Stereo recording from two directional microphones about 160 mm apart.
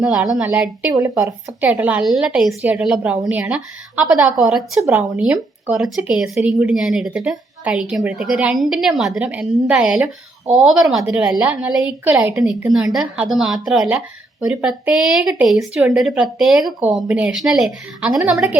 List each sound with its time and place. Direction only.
0.0 s a woman's voice: 5° right (ahead or behind)
12.7 s speech: 5° right (ahead or behind)